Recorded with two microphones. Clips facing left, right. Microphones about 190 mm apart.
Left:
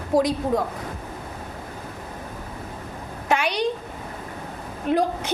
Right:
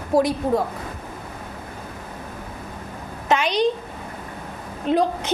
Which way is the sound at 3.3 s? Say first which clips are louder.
Right 3 dB; 10° left (ahead or behind).